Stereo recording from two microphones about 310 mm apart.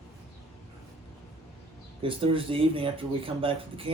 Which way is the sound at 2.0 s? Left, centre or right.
Centre.